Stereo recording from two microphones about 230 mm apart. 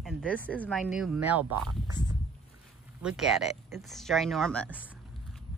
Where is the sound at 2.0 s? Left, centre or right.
Centre.